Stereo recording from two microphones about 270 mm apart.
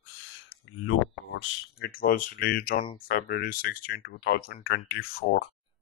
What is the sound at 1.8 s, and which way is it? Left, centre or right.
Speech, left.